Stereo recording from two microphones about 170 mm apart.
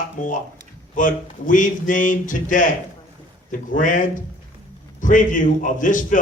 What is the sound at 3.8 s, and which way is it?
A man's voice, 50° left (ahead or behind).